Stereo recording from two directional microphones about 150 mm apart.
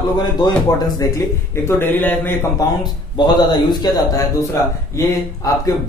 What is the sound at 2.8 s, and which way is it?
A man's voice, 30° left (ahead or behind).